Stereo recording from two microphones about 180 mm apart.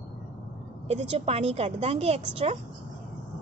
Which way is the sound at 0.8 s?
35° right (ahead or behind).